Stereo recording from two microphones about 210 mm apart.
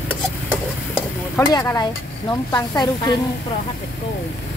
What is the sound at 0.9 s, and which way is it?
Speech, 15° left (ahead or behind).